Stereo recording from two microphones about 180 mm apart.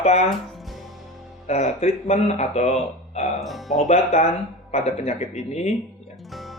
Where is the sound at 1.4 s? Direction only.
40° left (ahead or behind).